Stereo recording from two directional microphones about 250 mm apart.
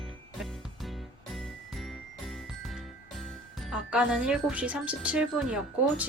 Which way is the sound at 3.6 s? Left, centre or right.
Centre.